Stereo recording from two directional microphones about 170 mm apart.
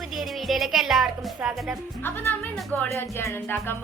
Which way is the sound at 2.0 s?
10° left (ahead or behind).